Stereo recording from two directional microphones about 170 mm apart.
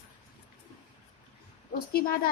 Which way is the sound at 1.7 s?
65° left (ahead or behind).